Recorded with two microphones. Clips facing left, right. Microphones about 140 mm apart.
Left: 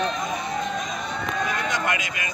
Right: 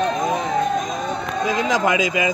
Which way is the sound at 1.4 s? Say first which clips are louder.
Right 11 dB; 90° right.